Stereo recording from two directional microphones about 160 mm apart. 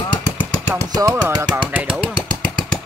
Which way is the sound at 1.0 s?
20° right (ahead or behind).